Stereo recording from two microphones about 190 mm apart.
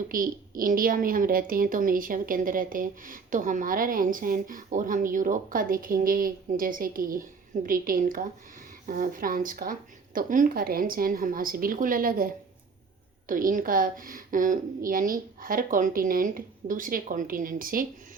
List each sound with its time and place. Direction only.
0.1 s a woman's voice: 45° right (ahead or behind)